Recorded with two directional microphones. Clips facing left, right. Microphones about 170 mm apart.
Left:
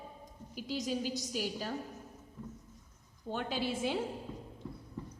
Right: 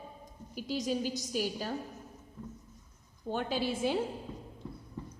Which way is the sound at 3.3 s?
45° right (ahead or behind).